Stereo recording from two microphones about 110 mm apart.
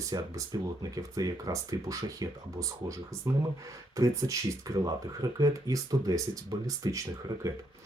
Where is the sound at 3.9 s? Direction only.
30° right (ahead or behind).